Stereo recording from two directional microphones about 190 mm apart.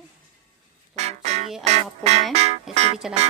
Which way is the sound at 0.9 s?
35° right (ahead or behind).